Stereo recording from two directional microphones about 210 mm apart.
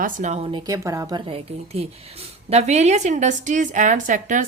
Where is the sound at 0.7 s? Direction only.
15° right (ahead or behind); by 4.4 s 35° right (ahead or behind).